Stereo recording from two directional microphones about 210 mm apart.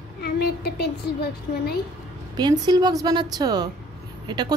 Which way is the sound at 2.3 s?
20° right (ahead or behind).